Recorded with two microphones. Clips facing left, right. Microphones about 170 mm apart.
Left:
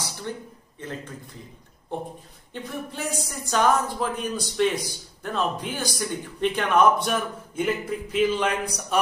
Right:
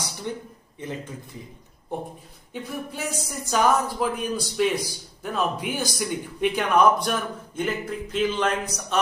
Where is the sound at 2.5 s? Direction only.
5° right (ahead or behind).